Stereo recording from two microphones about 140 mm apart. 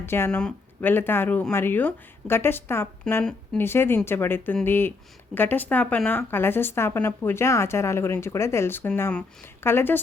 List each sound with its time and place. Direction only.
0.0 s speech: 15° left (ahead or behind)
0.3 s speech: 5° left (ahead or behind)
3.1 s speech: 5° left (ahead or behind)
3.6 s speech: 15° left (ahead or behind)